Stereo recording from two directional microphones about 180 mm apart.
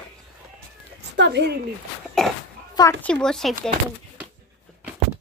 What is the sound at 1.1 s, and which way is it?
Speech, 70° right (ahead or behind).